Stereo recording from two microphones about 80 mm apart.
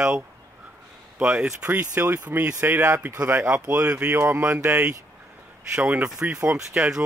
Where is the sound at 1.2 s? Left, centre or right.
Centre.